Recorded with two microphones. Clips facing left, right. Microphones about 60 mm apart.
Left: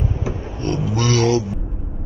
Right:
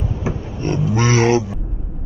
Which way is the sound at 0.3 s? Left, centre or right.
Right.